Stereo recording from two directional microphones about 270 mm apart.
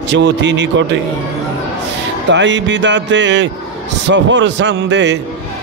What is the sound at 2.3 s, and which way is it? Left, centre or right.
Music, right.